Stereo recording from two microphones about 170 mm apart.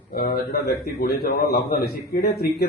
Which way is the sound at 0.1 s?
65° left (ahead or behind).